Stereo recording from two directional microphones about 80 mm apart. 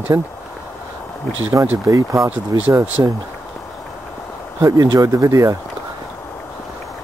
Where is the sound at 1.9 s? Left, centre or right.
Right.